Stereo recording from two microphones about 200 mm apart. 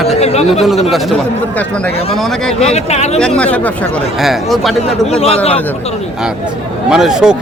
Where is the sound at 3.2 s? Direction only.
5° left (ahead or behind).